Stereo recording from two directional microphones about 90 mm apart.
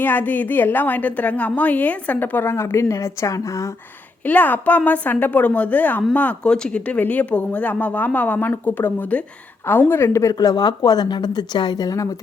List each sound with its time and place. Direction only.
0.0 s a woman's voice: 20° left (ahead or behind); by 3.7 s 35° left (ahead or behind)
4.3 s a woman's voice: 20° left (ahead or behind); by 12.0 s 45° left (ahead or behind)